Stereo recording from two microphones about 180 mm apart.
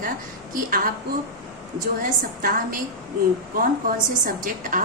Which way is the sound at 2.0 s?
50° right (ahead or behind).